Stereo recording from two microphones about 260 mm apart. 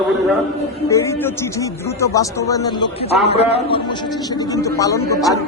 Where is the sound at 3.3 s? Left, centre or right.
Left.